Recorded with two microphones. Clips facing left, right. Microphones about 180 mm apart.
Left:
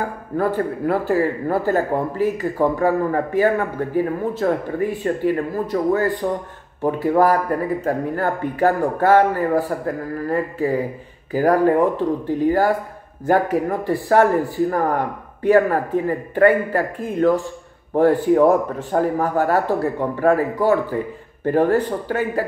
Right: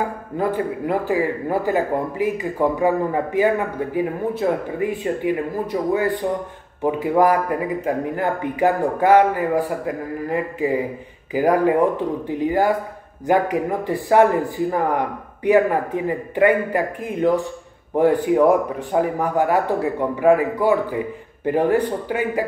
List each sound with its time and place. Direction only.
0.4 s a man's voice: 15° right (ahead or behind)